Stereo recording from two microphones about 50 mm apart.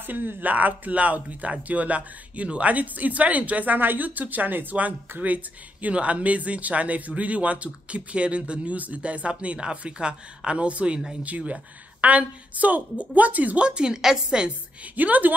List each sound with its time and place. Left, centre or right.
0.0 s speech: right
13.6 s a woman's voice: centre
15.0 s speech: right